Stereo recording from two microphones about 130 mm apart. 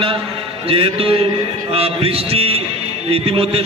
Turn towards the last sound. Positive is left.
turn(degrees=-50)  # may be behind; listen again after turning